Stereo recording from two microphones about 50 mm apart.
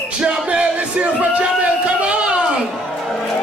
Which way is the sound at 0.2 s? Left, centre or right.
Centre.